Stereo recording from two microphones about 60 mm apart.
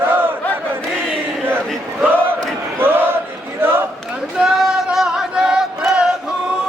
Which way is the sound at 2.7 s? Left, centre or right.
Right.